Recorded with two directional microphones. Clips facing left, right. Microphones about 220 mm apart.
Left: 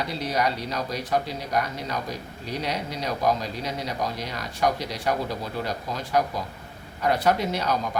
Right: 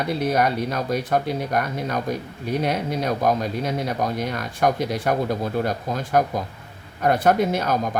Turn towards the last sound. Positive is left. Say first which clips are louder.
# right 4 dB
turn(degrees=-50)  # may be behind; listen again after turning